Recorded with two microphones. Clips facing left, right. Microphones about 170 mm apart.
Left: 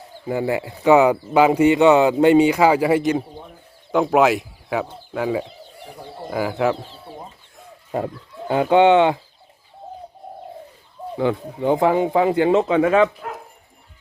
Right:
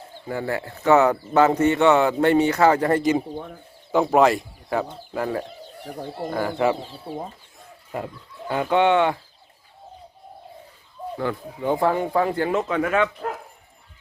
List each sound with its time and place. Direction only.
0.3 s speech: 15° left (ahead or behind)
5.9 s speech: 60° right (ahead or behind)
6.3 s speech: 5° left (ahead or behind)
8.7 s speech: 25° left (ahead or behind)
11.2 s speech: 20° left (ahead or behind)